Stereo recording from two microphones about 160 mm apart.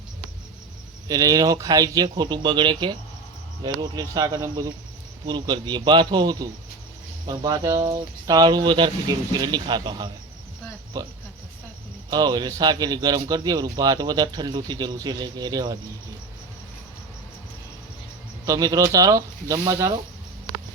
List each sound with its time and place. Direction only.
1.0 s speech: 25° right (ahead or behind)
12.1 s speech: 25° right (ahead or behind)
18.4 s speech: 20° right (ahead or behind)